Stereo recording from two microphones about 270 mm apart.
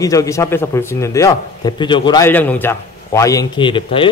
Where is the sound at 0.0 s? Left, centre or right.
Centre.